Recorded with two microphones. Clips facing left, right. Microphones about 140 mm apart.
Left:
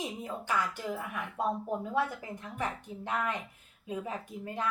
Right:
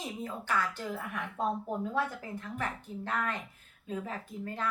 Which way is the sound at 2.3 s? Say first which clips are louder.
Left 1 dB; 15° left (ahead or behind).